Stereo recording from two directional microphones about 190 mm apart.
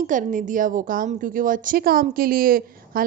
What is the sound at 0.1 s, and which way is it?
A woman's voice, 45° right (ahead or behind).